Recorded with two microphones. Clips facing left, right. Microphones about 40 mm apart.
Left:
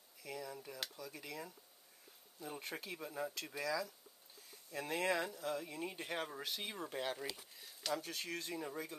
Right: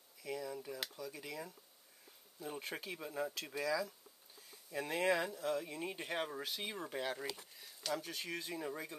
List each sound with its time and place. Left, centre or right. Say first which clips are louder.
0.2 s speech: right 4 dB; centre